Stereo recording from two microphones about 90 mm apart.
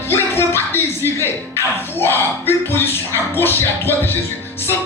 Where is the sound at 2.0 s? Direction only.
25° left (ahead or behind).